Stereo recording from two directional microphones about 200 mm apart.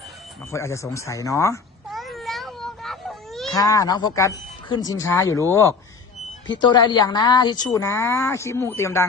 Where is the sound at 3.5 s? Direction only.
15° left (ahead or behind).